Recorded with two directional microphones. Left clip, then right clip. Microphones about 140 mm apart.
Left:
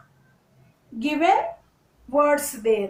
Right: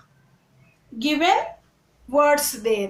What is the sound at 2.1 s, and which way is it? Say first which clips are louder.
Speech: right 2 dB; 35° right (ahead or behind).